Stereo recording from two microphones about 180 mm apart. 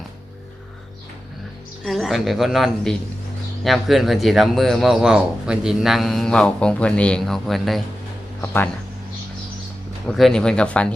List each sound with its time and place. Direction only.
1.8 s speech: centre (ahead or behind)
8.4 s speech: 10° left (ahead or behind)
10.1 s speech: centre (ahead or behind)